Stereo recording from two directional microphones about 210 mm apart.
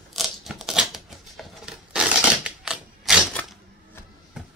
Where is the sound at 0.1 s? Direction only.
Centre (ahead or behind).